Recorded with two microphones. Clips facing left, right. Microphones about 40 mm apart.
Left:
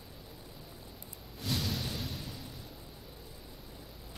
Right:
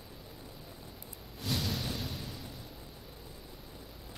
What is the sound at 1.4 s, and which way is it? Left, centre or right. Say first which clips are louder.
Music: even; centre.